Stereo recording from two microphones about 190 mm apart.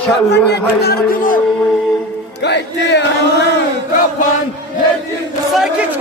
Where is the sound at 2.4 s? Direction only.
65° left (ahead or behind).